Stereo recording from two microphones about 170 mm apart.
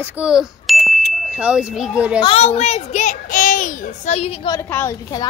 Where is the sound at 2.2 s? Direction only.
35° left (ahead or behind).